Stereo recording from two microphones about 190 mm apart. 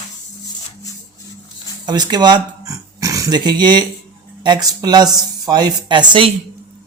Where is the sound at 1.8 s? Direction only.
20° right (ahead or behind).